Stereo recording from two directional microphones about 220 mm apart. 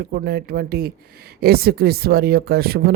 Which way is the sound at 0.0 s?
45° right (ahead or behind).